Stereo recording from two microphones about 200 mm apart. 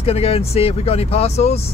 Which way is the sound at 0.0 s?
30° left (ahead or behind).